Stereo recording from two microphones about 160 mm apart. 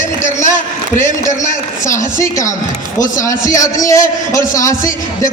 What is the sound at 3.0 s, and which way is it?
A man's voice, 20° left (ahead or behind).